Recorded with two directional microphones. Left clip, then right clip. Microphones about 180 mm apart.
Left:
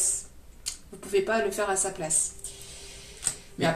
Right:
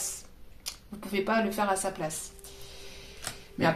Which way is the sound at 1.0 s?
35° right (ahead or behind).